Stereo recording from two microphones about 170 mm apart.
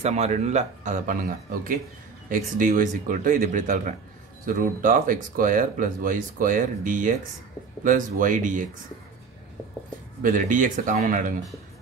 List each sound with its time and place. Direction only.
0.0 s speech: 40° right (ahead or behind)
10.2 s speech: 50° right (ahead or behind)